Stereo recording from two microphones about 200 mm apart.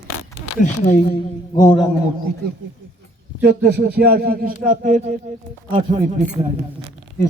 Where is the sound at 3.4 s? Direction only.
60° right (ahead or behind); by 4.9 s 40° right (ahead or behind).